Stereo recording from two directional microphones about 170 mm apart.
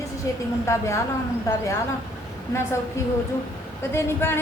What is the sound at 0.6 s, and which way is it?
Speech, 15° left (ahead or behind).